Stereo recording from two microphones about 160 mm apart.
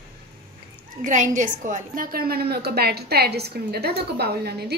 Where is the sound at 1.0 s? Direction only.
50° right (ahead or behind).